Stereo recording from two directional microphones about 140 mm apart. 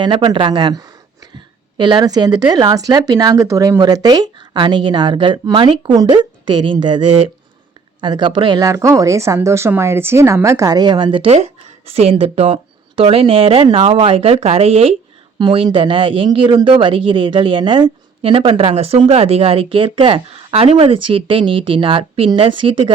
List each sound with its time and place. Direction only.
0.0 s speech: 35° right (ahead or behind)
15.4 s speech: 35° right (ahead or behind)